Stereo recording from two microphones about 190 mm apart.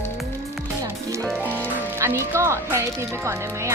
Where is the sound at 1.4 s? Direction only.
10° right (ahead or behind).